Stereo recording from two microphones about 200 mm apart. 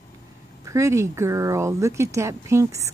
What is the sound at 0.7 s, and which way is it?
Speech, 15° right (ahead or behind).